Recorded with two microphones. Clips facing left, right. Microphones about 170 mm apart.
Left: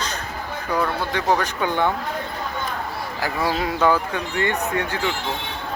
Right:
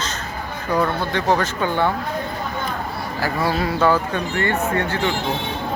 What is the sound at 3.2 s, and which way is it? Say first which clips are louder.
Speech: right 2 dB; 15° left (ahead or behind).